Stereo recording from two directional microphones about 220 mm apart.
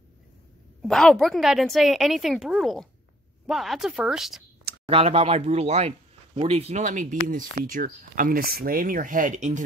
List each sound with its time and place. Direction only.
0.8 s a woman's voice: 5° left (ahead or behind)
4.8 s speech: 25° right (ahead or behind)